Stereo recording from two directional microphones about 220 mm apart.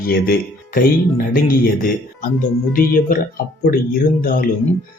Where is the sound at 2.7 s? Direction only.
40° left (ahead or behind).